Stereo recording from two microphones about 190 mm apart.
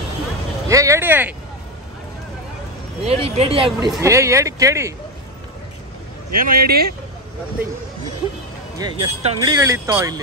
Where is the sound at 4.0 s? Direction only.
15° right (ahead or behind).